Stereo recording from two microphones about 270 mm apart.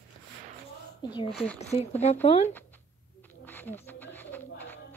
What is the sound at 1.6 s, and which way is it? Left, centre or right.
Speech, left.